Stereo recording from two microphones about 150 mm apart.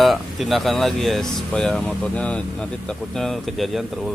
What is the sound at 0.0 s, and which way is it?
Speech, centre (ahead or behind).